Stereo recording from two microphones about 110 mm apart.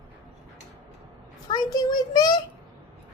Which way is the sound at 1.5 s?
35° left (ahead or behind).